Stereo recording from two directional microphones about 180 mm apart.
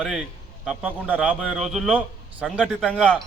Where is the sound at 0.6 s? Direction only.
5° right (ahead or behind).